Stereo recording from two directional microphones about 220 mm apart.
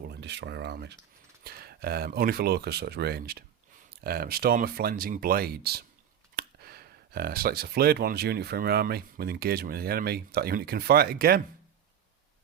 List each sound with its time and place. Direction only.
0.1 s speech: 50° right (ahead or behind)